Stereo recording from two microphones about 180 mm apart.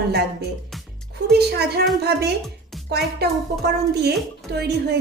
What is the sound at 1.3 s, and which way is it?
Speech, 65° right (ahead or behind).